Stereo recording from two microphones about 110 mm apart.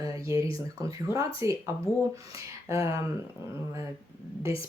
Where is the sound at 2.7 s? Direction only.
30° right (ahead or behind).